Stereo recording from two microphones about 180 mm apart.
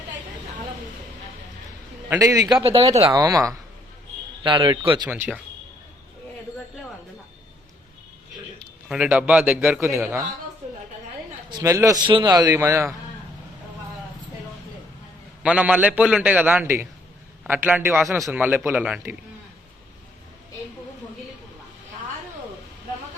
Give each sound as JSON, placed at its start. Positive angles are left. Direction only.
{"t": 2.0, "sound": "a man's voice", "side_deg": -20}
{"t": 5.0, "sound": "a man's voice", "side_deg": -10}
{"t": 8.9, "sound": "a man's voice", "side_deg": -5}
{"t": 11.4, "sound": "a man's voice", "side_deg": -20}
{"t": 15.4, "sound": "a man's voice", "side_deg": -5}